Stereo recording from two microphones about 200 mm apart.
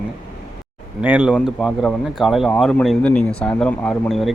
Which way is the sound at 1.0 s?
5° right (ahead or behind).